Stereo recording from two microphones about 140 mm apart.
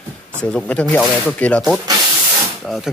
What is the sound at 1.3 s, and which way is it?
Speech, 10° left (ahead or behind).